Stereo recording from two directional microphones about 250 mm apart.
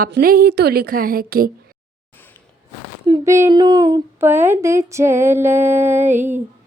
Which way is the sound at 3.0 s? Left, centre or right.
Centre.